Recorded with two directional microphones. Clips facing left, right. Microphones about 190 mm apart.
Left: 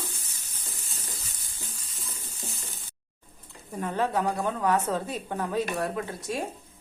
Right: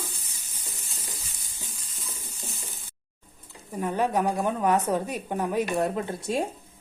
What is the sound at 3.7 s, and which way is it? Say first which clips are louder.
A woman's voice: right 2 dB; 10° right (ahead or behind).